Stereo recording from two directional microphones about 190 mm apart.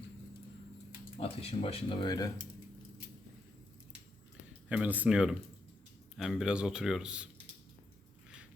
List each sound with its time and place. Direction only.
1.2 s speech: 30° left (ahead or behind)
4.7 s speech: 10° right (ahead or behind)